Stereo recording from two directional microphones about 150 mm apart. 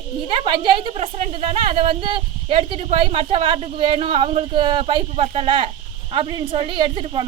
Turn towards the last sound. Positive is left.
turn(degrees=-35)  # may be behind; listen again after turning